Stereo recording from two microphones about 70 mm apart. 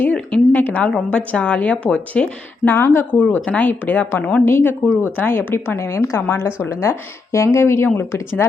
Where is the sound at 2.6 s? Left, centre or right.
Left.